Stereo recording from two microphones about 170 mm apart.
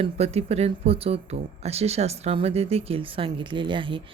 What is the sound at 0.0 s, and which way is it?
A woman's voice, 40° right (ahead or behind).